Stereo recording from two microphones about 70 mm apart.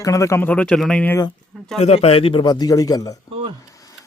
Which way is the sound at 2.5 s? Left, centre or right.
Left.